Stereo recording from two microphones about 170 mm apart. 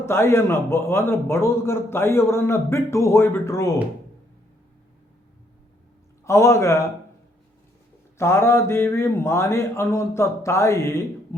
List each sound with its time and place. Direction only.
0.0 s a man's voice: 15° left (ahead or behind)
6.2 s a man's voice: 15° left (ahead or behind)
8.2 s a man's voice: 15° left (ahead or behind)